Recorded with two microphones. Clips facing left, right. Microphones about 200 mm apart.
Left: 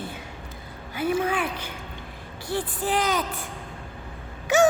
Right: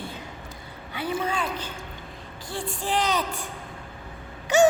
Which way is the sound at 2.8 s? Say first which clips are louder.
Even; centre (ahead or behind).